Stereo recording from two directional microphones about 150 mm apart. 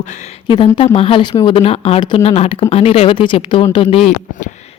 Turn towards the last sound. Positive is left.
turn(degrees=35)  # may be behind; listen again after turning